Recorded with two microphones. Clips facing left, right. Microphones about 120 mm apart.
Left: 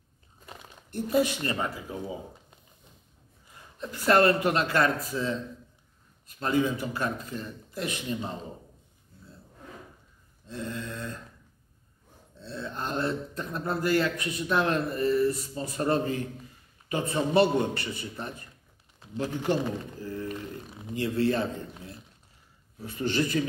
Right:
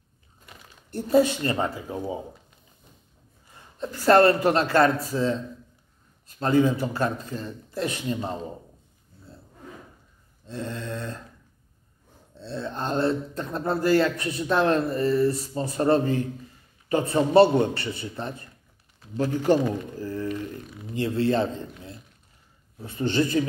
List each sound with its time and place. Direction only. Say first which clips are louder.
0.5 s crumpling: left 4 dB; 40° left (ahead or behind)
0.9 s speech: right 5 dB; 30° right (ahead or behind)
3.8 s speech: right 5 dB; 35° right (ahead or behind)
10.5 s speech: right 3 dB; 30° right (ahead or behind)
12.4 s speech: right 4 dB; 30° right (ahead or behind)
20.9 s speech: right 3 dB; 30° right (ahead or behind)